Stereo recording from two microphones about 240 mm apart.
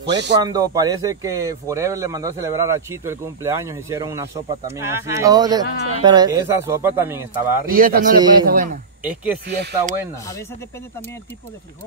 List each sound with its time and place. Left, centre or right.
0.0 s speech: right
0.4 s speech: centre
7.7 s a man's voice: right
9.0 s speech: centre
9.5 s speech: right